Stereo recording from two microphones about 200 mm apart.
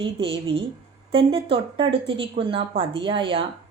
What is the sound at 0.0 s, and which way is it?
Speech, 25° right (ahead or behind).